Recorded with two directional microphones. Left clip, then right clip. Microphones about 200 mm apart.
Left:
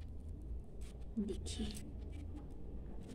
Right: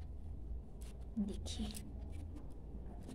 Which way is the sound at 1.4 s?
55° right (ahead or behind).